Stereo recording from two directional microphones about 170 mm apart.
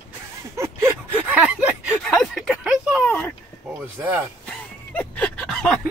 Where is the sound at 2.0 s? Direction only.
5° left (ahead or behind).